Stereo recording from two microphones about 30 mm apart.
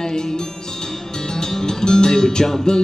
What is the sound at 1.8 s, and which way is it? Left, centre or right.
Speech, left.